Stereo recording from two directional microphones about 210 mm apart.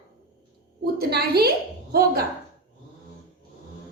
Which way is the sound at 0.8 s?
50° right (ahead or behind).